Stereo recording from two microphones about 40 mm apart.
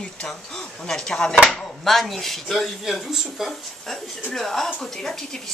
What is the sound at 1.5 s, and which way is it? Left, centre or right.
Speech, centre.